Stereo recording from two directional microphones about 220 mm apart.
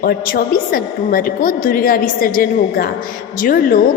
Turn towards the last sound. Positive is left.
turn(degrees=40)  # may be behind; listen again after turning